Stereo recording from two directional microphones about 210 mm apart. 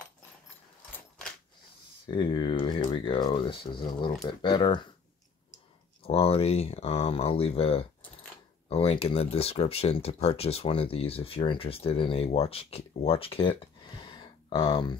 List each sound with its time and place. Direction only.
0.9 s a sound: 5° left (ahead or behind)
2.0 s speech: 20° left (ahead or behind)
6.0 s speech: 25° left (ahead or behind)